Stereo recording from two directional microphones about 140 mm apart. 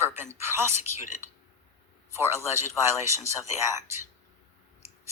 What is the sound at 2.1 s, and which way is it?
Speech, 20° right (ahead or behind).